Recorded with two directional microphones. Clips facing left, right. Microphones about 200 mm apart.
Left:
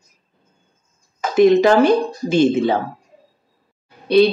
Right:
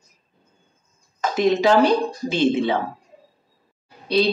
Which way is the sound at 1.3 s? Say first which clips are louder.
Left 5 dB; 50° left (ahead or behind).